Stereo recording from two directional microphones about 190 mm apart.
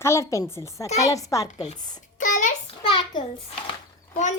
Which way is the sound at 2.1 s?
40° left (ahead or behind).